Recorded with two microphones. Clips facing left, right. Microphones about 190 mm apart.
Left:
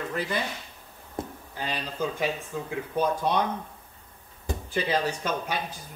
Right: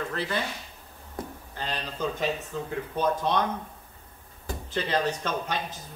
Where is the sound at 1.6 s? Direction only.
10° left (ahead or behind).